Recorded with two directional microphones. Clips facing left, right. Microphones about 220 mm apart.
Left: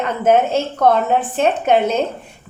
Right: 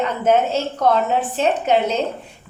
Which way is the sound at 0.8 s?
55° left (ahead or behind).